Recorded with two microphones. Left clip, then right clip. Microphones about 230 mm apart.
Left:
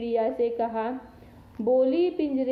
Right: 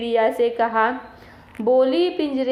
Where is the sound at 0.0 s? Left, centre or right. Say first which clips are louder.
Right 7 dB; centre.